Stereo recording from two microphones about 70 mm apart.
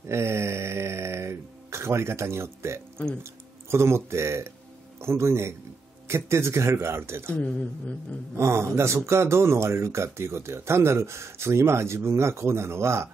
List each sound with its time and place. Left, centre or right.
0.1 s mantra: right
3.7 s speech: right
7.3 s speech: centre
8.4 s speech: right